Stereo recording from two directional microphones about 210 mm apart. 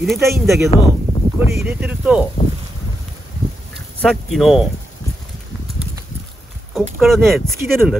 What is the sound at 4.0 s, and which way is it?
Speech, centre (ahead or behind).